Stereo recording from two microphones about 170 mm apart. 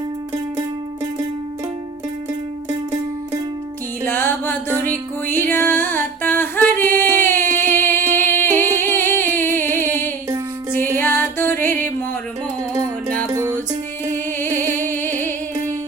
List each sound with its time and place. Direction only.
4.0 s music: 10° left (ahead or behind)
7.7 s singing: 10° left (ahead or behind)
8.1 s music: 10° left (ahead or behind)
13.3 s music: 20° right (ahead or behind)
14.1 s music: 10° left (ahead or behind)